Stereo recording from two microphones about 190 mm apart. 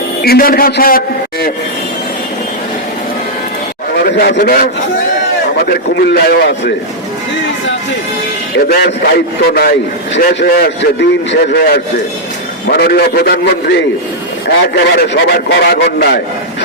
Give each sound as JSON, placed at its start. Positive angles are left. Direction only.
{"t": 0.2, "sound": "a man's voice", "side_deg": 50}
{"t": 3.9, "sound": "a man's voice", "side_deg": 60}
{"t": 8.5, "sound": "a man's voice", "side_deg": 55}